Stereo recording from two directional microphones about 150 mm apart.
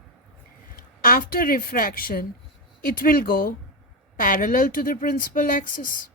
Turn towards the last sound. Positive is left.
turn(degrees=65)  # may be behind; listen again after turning